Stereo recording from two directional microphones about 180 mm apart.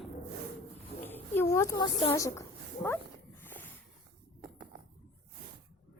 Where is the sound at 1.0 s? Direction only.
10° left (ahead or behind).